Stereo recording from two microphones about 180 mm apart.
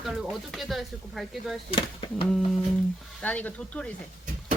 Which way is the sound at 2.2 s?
Centre (ahead or behind).